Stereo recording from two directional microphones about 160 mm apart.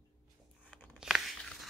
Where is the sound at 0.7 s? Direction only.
10° left (ahead or behind).